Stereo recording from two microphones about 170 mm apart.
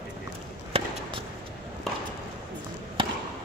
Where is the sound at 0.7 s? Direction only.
35° right (ahead or behind).